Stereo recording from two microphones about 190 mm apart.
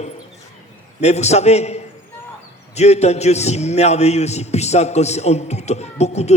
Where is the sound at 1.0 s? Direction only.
35° left (ahead or behind).